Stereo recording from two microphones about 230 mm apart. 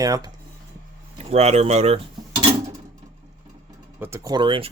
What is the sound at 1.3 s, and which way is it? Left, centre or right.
Speech, right.